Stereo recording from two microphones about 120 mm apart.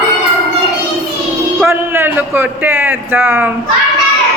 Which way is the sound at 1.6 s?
20° right (ahead or behind).